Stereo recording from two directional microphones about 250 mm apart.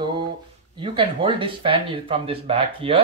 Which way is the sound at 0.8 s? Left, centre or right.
Centre.